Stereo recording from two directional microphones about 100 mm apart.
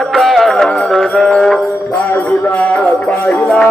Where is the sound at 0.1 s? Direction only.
Centre (ahead or behind).